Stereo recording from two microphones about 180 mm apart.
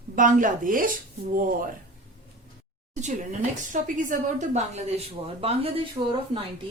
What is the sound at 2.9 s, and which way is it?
A woman's voice, 40° right (ahead or behind).